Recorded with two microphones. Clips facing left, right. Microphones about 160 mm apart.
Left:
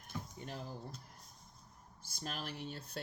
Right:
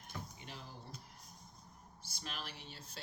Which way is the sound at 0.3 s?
45° left (ahead or behind).